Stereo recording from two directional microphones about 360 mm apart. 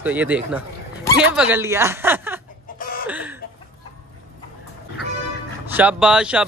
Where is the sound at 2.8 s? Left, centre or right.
Left.